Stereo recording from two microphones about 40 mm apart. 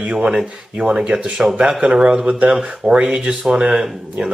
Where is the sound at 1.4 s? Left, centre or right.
Centre.